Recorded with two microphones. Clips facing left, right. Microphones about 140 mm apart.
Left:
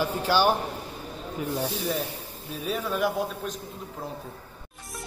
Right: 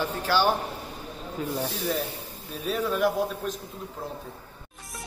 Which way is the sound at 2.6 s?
Centre (ahead or behind).